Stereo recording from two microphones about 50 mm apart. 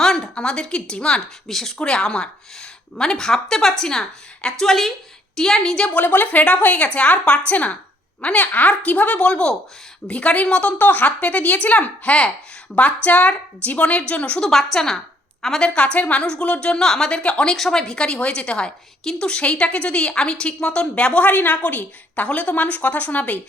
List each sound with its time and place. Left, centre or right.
0.0 s speech: centre
1.5 s speech: centre
1.8 s a woman's voice: centre
6.0 s a woman's voice: left
10.8 s a woman's voice: left
14.4 s a woman's voice: centre
15.7 s a woman's voice: left
16.8 s a woman's voice: centre
17.1 s a woman's voice: left
17.5 s a woman's voice: centre; by 23.4 s left